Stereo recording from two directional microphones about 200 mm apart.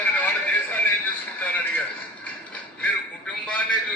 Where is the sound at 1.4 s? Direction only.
10° left (ahead or behind).